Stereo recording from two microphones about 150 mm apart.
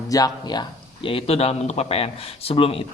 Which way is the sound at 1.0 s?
40° left (ahead or behind).